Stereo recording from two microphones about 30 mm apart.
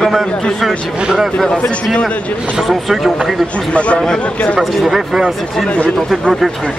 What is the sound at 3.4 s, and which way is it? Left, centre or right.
Speech, left.